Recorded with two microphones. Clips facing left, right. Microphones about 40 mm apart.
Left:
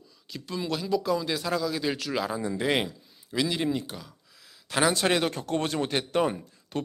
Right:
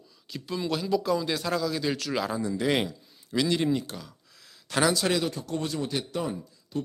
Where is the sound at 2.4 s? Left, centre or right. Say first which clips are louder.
Right 1 dB; left; by 4.8 s centre.